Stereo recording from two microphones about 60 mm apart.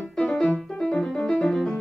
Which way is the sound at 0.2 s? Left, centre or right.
Centre.